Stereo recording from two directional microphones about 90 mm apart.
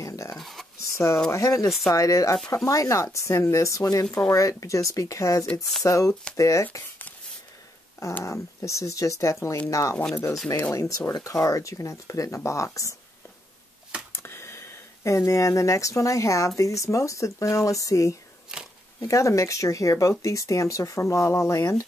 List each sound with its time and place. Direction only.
0.0 s a sound: 35° left (ahead or behind)
0.4 s a sound: centre (ahead or behind)
0.9 s speech: 30° left (ahead or behind)
8.2 s speech: 35° left (ahead or behind)
14.1 s speech: 30° left (ahead or behind)
18.5 s biting: 5° right (ahead or behind)
18.9 s speech: 35° left (ahead or behind)